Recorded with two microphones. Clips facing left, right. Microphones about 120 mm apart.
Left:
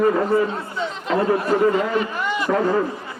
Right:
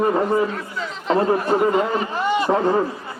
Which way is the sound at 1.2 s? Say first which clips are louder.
Even; 30° right (ahead or behind).